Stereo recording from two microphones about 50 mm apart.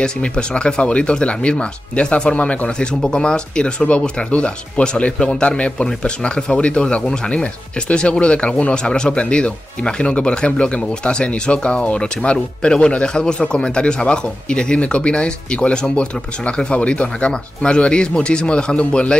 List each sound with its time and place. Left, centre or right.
0.0 s speech: centre